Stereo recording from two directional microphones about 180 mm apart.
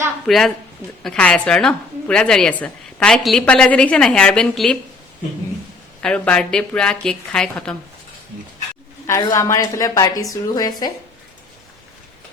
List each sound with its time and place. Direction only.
0.3 s a woman's voice: centre (ahead or behind)
6.0 s a woman's voice: 5° left (ahead or behind)
9.0 s a woman's voice: 15° left (ahead or behind)